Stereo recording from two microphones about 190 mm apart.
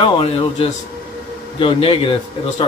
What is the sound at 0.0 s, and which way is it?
A man's voice, 30° left (ahead or behind).